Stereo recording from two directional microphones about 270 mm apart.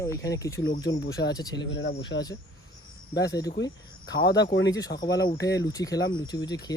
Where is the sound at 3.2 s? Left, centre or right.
Centre.